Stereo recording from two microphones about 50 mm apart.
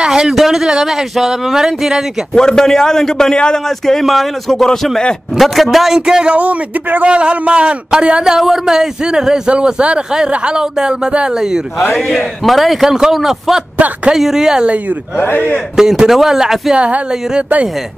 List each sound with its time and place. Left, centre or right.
0.0 s a sound: centre
0.4 s a man's voice: centre
2.3 s speech: centre
5.3 s a man's voice: centre
5.9 s a man's voice: centre
6.3 s speech: right
7.1 s a man's voice: right
11.9 s a man's voice: centre
13.7 s speech: right
14.1 s a man's voice: centre
15.1 s a man's voice: left
15.7 s a man's voice: centre
16.7 s a man's voice: right